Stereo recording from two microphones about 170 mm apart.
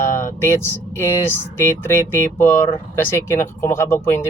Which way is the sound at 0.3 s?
15° left (ahead or behind).